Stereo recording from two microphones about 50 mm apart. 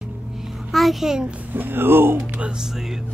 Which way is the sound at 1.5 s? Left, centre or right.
Right.